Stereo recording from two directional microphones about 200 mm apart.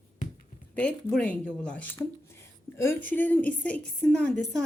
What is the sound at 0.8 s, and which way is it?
A woman's voice, 5° left (ahead or behind).